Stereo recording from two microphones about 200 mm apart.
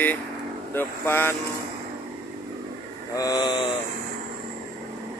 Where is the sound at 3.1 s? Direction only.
20° left (ahead or behind).